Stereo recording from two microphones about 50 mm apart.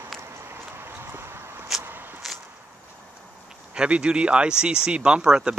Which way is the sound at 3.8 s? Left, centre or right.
Centre.